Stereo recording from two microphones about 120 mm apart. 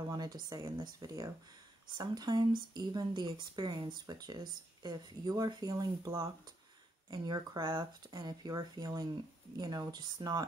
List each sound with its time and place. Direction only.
0.1 s a woman's voice: 30° right (ahead or behind)